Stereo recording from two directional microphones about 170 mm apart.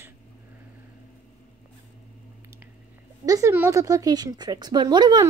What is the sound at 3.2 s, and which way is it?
Speech, 20° right (ahead or behind).